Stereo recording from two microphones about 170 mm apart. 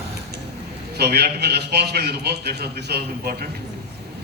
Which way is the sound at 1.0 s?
70° right (ahead or behind).